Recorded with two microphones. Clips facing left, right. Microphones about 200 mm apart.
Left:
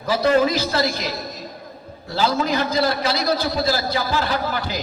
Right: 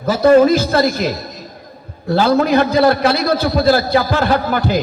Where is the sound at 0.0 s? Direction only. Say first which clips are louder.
Right 8 dB; 45° right (ahead or behind).